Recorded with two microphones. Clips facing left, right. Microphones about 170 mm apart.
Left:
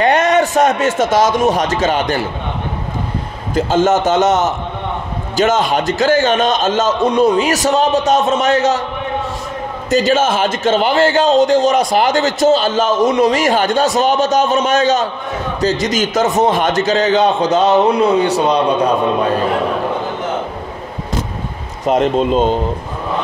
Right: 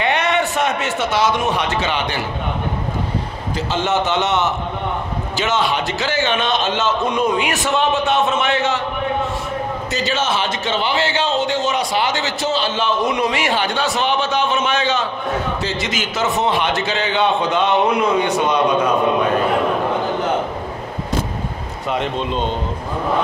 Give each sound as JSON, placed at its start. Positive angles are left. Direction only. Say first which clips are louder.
{"t": 0.0, "sound": "speech", "louder": "left 6 dB", "side_deg": 45}
{"t": 3.5, "sound": "a man's voice", "louder": "left 7 dB", "side_deg": 45}
{"t": 9.8, "sound": "a man's voice", "louder": "left 10 dB", "side_deg": 45}
{"t": 21.8, "sound": "speech", "louder": "left 8 dB", "side_deg": 45}